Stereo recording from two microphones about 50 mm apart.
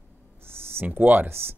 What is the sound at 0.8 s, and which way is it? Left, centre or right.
Speech, right.